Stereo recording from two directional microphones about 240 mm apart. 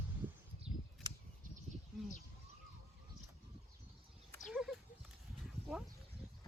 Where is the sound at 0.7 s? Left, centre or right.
Right.